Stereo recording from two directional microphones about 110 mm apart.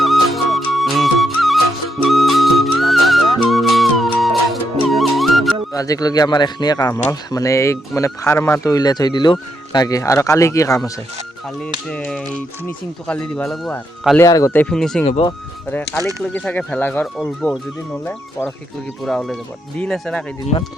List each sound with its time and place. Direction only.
0.0 s music: centre (ahead or behind)
5.7 s speech: 30° left (ahead or behind)
8.6 s speech: 35° left (ahead or behind)
11.9 s speech: 5° left (ahead or behind)
14.3 s speech: 35° left (ahead or behind)
14.5 s speech: 15° left (ahead or behind)
14.8 s speech: 5° left (ahead or behind)
16.0 s speech: 30° right (ahead or behind)
16.3 s speech: 10° left (ahead or behind)
19.0 s speech: centre (ahead or behind)
20.5 s speech: 65° left (ahead or behind)